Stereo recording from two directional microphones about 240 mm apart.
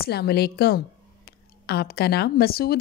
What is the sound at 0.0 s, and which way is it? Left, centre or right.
A woman's voice, left.